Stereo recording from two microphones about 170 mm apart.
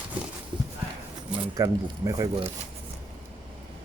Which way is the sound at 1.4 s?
20° right (ahead or behind).